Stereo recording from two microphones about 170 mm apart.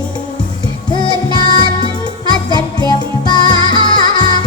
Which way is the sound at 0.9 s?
25° left (ahead or behind).